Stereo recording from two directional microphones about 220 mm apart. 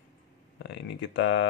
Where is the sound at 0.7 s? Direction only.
55° left (ahead or behind).